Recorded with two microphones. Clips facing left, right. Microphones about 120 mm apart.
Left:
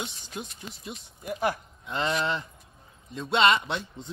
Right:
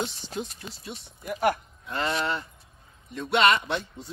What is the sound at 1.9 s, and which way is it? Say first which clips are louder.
A man's voice: even; 20° left (ahead or behind).